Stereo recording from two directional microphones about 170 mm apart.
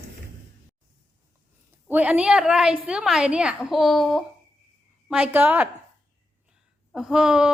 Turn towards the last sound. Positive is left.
turn(degrees=-5)  # may be behind; listen again after turning